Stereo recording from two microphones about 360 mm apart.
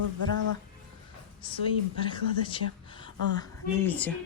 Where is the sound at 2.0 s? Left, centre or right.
Centre.